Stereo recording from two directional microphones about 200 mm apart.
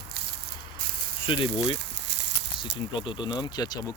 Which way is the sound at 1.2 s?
25° left (ahead or behind).